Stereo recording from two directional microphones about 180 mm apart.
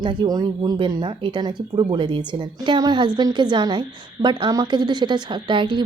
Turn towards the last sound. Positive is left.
turn(degrees=-25)  # may be behind; listen again after turning